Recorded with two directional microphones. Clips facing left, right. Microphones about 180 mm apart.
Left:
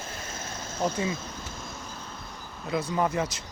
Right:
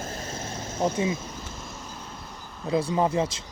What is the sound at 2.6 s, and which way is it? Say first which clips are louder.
Speech: right 3 dB; 30° right (ahead or behind).